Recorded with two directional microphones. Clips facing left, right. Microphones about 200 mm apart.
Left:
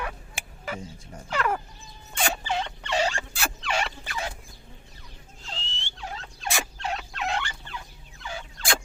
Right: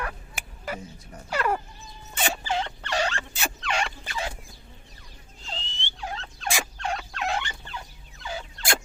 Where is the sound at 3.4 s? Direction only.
5° left (ahead or behind).